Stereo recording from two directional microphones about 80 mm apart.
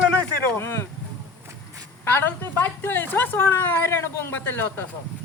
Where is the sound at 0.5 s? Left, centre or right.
Left.